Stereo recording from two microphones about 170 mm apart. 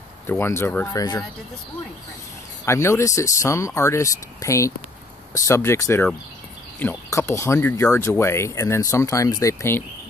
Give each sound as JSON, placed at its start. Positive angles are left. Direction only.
{"t": 0.3, "sound": "speech", "side_deg": 15}
{"t": 2.6, "sound": "speech", "side_deg": 15}